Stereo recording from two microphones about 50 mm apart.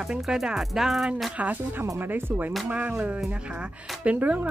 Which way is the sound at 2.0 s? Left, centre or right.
Right.